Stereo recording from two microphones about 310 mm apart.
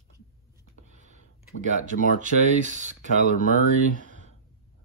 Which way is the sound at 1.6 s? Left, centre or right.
Right.